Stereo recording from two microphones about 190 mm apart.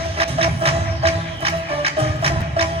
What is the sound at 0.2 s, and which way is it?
Music, 30° right (ahead or behind).